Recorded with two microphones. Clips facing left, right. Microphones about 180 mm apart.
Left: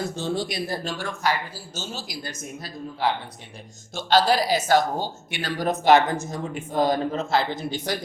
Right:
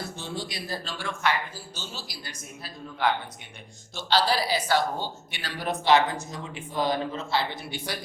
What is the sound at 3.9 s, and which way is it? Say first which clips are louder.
Speech: left 5 dB; 45° left (ahead or behind).